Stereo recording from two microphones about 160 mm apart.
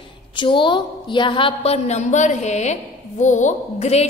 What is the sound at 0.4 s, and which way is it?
A woman's voice, 30° left (ahead or behind).